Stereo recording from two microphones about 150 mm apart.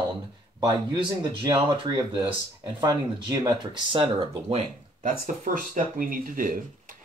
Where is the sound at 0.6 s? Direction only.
30° right (ahead or behind).